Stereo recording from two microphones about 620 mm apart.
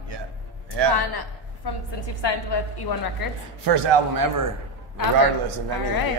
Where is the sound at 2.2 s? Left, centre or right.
Left.